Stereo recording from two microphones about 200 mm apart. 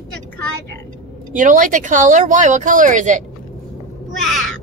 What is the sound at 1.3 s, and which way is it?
A woman's voice, 40° right (ahead or behind).